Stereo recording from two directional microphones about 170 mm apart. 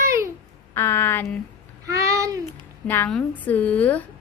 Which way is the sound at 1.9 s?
20° right (ahead or behind).